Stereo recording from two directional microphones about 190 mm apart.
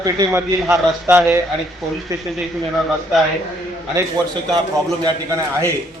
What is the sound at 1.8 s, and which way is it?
Speech, centre (ahead or behind).